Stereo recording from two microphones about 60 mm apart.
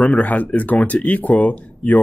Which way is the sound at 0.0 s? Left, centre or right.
Left.